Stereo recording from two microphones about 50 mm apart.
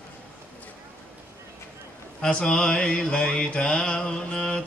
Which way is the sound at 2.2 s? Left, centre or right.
Centre.